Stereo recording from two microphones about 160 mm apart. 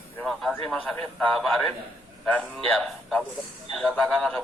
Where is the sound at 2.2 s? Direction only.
5° left (ahead or behind).